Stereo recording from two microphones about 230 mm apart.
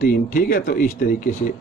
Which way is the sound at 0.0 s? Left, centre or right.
Left.